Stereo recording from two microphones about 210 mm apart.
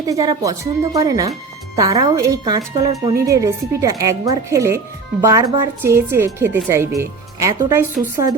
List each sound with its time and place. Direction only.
0.1 s a woman's voice: 15° right (ahead or behind)